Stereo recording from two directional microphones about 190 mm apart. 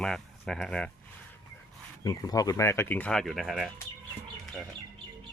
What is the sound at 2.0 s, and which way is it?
Speech, 20° left (ahead or behind).